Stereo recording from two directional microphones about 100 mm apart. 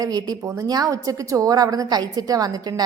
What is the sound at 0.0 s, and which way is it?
A woman's voice, 40° right (ahead or behind).